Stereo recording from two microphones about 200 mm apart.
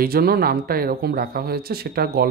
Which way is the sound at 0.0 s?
50° right (ahead or behind).